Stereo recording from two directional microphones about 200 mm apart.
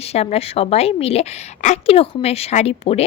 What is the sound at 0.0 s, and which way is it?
A woman's voice, 30° left (ahead or behind).